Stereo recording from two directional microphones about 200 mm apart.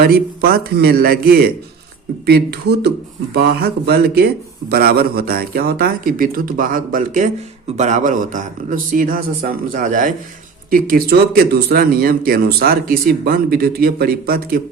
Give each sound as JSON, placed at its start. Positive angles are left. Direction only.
{"t": 0.0, "sound": "a man's voice", "side_deg": -50}